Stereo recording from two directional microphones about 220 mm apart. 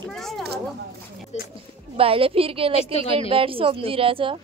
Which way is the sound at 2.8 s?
25° left (ahead or behind).